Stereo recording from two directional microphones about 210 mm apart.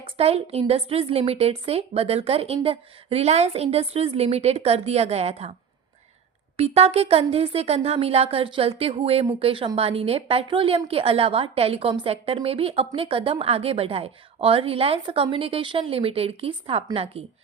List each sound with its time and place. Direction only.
0.0 s speech: 30° right (ahead or behind)
6.6 s speech: 30° right (ahead or behind)